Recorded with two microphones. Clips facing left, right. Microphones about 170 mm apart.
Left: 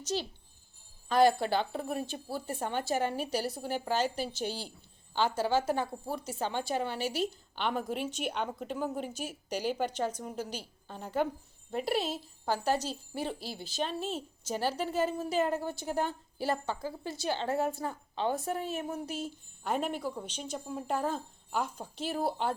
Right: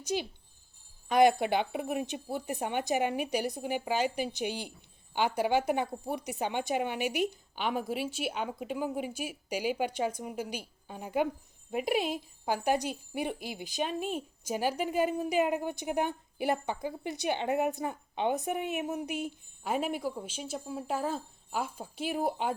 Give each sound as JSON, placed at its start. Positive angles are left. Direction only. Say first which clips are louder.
{"t": 0.0, "sound": "speech", "louder": "right 1 dB", "side_deg": -10}